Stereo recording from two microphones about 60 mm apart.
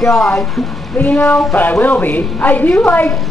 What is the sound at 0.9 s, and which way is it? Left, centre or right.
Speech, left.